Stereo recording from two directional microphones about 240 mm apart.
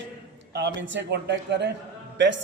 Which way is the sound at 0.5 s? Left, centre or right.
Right.